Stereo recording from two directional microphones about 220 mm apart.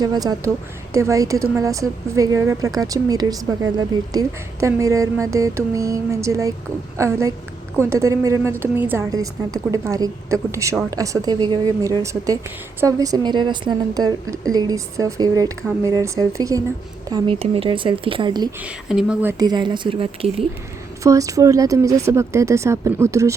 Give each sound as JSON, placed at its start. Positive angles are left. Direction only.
{"t": 0.0, "sound": "a woman's voice", "side_deg": -15}
{"t": 18.6, "sound": "a woman's voice", "side_deg": -5}